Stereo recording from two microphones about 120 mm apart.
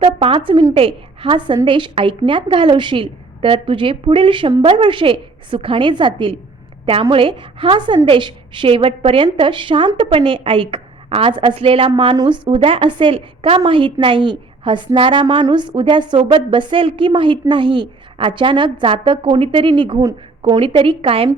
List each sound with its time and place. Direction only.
0.2 s a woman's voice: 45° right (ahead or behind)